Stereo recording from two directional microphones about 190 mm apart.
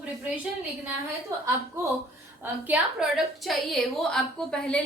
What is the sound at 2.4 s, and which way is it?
A woman's voice, 5° right (ahead or behind).